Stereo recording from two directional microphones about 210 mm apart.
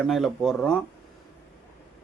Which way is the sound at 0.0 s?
Centre (ahead or behind).